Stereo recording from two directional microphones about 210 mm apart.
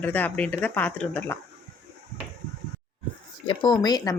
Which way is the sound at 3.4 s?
25° left (ahead or behind).